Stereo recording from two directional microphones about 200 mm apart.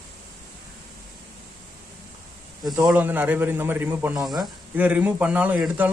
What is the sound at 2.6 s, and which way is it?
A man's voice, 15° right (ahead or behind).